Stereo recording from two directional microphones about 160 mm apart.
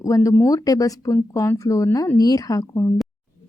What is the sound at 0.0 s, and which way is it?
A woman's voice, 20° left (ahead or behind).